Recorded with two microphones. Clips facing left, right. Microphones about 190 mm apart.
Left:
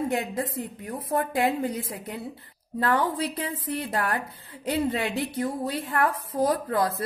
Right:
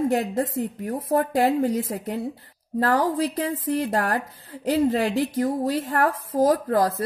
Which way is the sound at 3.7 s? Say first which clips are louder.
Right 3 dB; 45° right (ahead or behind).